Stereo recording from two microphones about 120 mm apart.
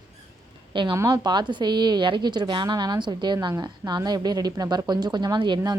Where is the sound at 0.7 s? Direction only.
45° right (ahead or behind).